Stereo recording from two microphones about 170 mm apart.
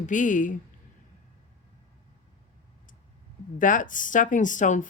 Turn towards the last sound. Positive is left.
turn(degrees=45)  # may be behind; listen again after turning